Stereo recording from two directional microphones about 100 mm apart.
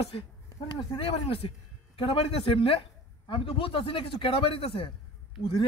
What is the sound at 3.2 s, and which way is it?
Speech, 60° left (ahead or behind).